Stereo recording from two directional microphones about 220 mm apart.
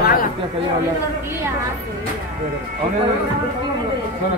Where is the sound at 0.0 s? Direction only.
40° left (ahead or behind).